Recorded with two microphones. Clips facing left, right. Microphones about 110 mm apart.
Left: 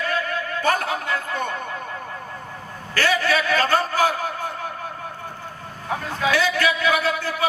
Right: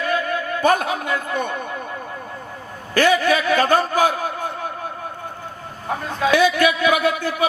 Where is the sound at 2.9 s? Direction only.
20° right (ahead or behind).